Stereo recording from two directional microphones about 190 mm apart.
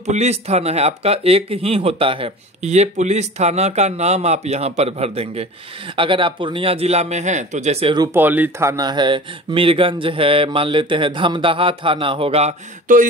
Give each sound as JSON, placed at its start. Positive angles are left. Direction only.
{"t": 0.0, "sound": "speech", "side_deg": -35}
{"t": 8.1, "sound": "speech", "side_deg": -10}